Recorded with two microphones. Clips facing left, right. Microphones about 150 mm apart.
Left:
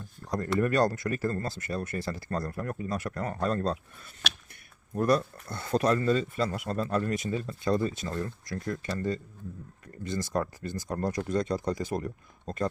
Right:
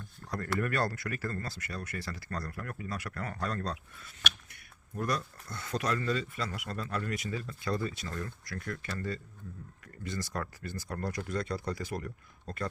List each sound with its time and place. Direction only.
0.3 s speech: 20° left (ahead or behind)
4.9 s speech: 35° left (ahead or behind)